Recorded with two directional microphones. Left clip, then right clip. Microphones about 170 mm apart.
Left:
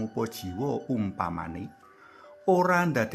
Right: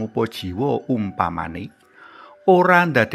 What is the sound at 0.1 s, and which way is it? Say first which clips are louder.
Speech: right 9 dB; 20° right (ahead or behind).